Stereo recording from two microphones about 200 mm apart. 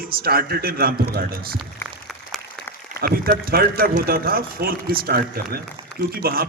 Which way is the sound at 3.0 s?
45° right (ahead or behind).